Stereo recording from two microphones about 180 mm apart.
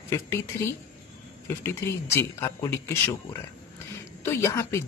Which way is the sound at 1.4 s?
15° left (ahead or behind).